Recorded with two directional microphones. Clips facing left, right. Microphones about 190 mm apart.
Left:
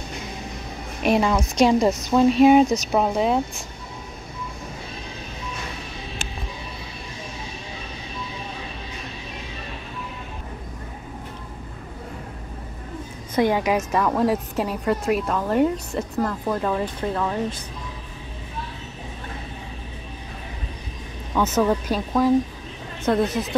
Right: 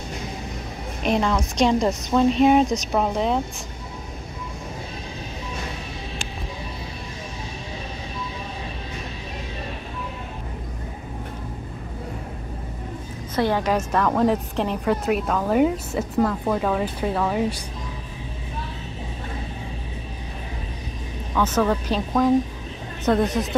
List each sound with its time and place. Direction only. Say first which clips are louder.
1.0 s a woman's voice: left 2 dB; 5° left (ahead or behind)
13.4 s a woman's voice: left 1 dB; 10° left (ahead or behind); by 17.6 s 10° right (ahead or behind)
21.4 s a woman's voice: left 1 dB; 10° left (ahead or behind)